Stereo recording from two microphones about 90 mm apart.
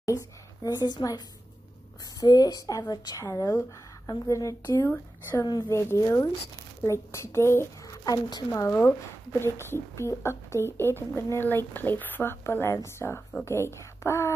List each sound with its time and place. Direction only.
0.7 s a woman's voice: 50° left (ahead or behind)
4.8 s a woman's voice: 25° left (ahead or behind)
5.4 s a woman's voice: 45° left (ahead or behind)
5.7 s speech: 30° left (ahead or behind)
8.0 s a woman's voice: 50° left (ahead or behind)
8.5 s a woman's voice: 35° left (ahead or behind)